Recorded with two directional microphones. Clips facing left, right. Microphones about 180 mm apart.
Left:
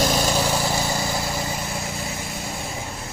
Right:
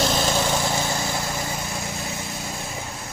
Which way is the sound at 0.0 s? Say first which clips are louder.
Left 1 dB; 10° left (ahead or behind).